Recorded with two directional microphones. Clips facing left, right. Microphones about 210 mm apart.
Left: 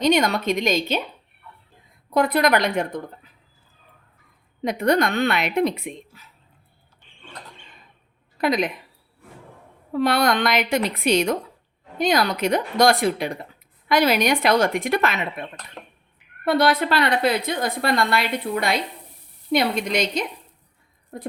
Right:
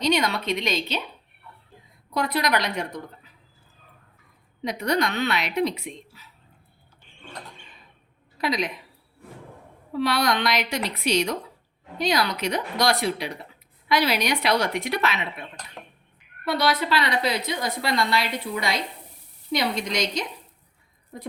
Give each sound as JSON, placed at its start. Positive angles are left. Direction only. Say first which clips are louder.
{"t": 0.0, "sound": "a woman's voice", "louder": "left 4 dB", "side_deg": 50}
{"t": 2.1, "sound": "a woman's voice", "louder": "left 6 dB", "side_deg": 50}
{"t": 4.6, "sound": "a woman's voice", "louder": "left 5 dB", "side_deg": 50}
{"t": 8.4, "sound": "a woman's voice", "louder": "left 5 dB", "side_deg": 50}
{"t": 9.9, "sound": "a woman's voice", "louder": "left 4 dB", "side_deg": 50}